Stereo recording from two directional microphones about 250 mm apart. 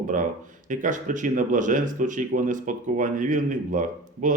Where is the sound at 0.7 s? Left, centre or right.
Right.